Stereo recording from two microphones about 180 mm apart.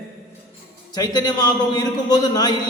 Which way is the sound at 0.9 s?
20° left (ahead or behind).